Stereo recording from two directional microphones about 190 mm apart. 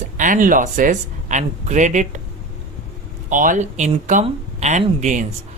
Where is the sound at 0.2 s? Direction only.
45° right (ahead or behind).